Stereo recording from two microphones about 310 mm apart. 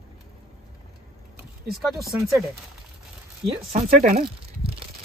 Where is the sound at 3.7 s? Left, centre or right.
Centre.